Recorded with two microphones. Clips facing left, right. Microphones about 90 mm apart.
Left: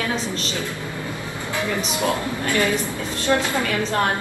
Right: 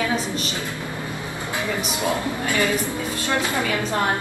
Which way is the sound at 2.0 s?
20° right (ahead or behind).